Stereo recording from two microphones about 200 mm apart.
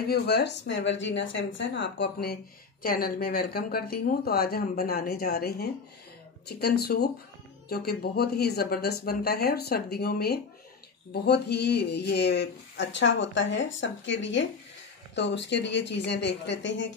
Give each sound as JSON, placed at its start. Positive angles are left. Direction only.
{"t": 0.1, "sound": "speech", "side_deg": 55}